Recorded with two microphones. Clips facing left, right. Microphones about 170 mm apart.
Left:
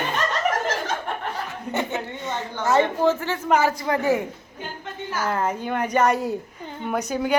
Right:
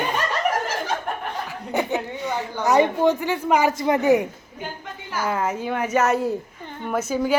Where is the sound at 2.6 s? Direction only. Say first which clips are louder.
Right 2 dB; 15° right (ahead or behind).